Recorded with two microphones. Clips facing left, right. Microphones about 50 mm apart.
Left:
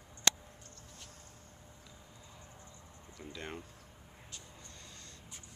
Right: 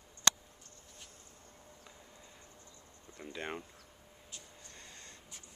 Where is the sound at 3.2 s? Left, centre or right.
Right.